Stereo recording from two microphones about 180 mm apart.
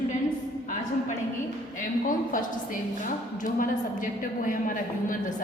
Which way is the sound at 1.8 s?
50° left (ahead or behind).